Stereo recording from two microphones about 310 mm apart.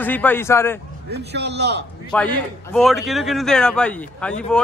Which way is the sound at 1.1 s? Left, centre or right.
Right.